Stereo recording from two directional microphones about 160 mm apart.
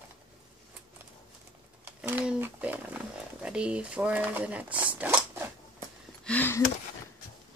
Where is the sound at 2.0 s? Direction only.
10° right (ahead or behind).